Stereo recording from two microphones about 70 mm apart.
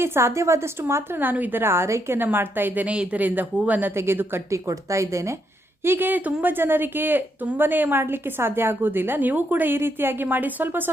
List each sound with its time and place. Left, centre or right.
0.0 s a woman's voice: right
1.3 s a woman's voice: right
4.5 s speech: right
5.8 s speech: right